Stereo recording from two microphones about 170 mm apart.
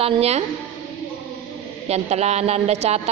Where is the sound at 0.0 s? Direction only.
35° right (ahead or behind).